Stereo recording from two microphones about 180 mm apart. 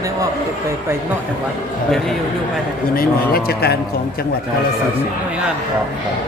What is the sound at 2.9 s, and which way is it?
Speech, 55° left (ahead or behind).